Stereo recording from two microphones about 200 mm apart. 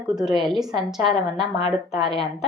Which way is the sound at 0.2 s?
Centre (ahead or behind).